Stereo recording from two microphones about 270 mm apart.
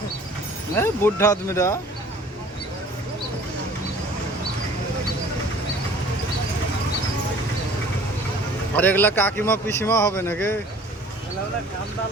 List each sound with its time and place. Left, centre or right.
0.8 s a man's voice: centre
8.7 s a man's voice: centre